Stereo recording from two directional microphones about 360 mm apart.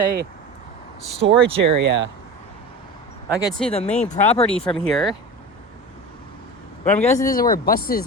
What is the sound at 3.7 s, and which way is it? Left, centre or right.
Speech, centre.